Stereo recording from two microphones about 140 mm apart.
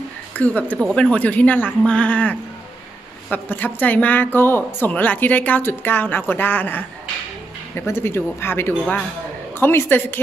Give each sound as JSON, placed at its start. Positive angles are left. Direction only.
{"t": 0.3, "sound": "speech", "side_deg": 10}